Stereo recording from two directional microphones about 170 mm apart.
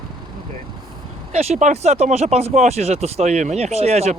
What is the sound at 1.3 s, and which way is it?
Speech, 40° right (ahead or behind).